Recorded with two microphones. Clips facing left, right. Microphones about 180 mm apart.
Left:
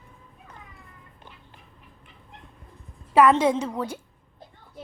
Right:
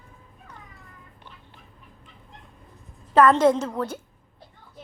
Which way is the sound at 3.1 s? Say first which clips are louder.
Right 1 dB; 10° left (ahead or behind).